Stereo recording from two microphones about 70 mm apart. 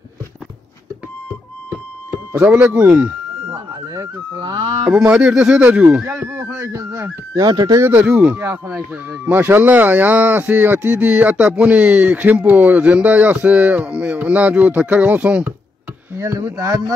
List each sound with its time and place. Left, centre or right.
2.0 s music: centre
2.5 s speech: right
3.5 s a sound: right
4.4 s speech: right
4.9 s speech: centre
6.5 s speech: right
7.3 s speech: right
8.0 s speech: centre
9.2 s speech: right
16.4 s speech: right